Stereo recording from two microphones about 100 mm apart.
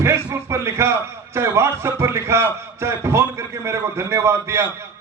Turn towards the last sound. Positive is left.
turn(degrees=-25)  # may be behind; listen again after turning